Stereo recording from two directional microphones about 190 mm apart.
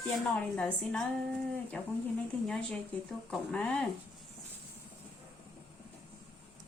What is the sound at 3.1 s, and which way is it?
Speech, 5° left (ahead or behind).